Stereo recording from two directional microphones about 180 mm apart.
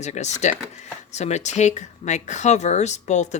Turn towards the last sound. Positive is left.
turn(degrees=40)  # may be behind; listen again after turning